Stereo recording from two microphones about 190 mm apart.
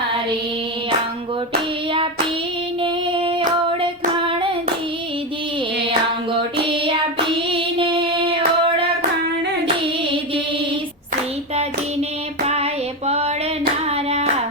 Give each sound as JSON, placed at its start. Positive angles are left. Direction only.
{"t": 2.8, "sound": "female singing", "side_deg": -25}
{"t": 6.7, "sound": "child singing", "side_deg": -25}
{"t": 7.5, "sound": "female singing", "side_deg": -25}
{"t": 13.1, "sound": "female singing", "side_deg": -35}
{"t": 13.9, "sound": "hands", "side_deg": -35}